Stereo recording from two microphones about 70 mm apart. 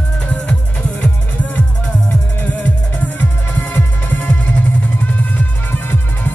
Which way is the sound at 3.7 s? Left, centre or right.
Left.